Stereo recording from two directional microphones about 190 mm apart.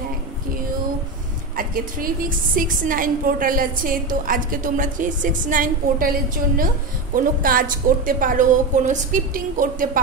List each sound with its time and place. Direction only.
1.6 s a woman's voice: 50° right (ahead or behind)